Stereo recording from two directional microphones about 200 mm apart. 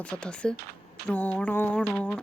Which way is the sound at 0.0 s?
5° left (ahead or behind).